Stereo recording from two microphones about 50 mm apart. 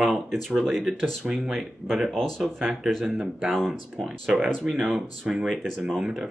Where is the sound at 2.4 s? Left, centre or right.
Centre.